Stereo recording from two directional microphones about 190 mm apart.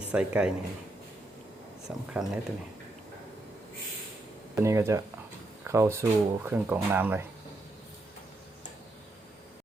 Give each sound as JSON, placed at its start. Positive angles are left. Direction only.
{"t": 0.1, "sound": "speech", "side_deg": -5}
{"t": 2.1, "sound": "speech", "side_deg": 0}
{"t": 4.5, "sound": "speech", "side_deg": -15}